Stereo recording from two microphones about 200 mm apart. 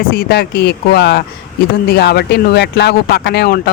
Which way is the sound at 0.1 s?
50° left (ahead or behind).